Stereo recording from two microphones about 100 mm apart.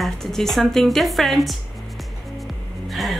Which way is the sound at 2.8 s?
Centre (ahead or behind).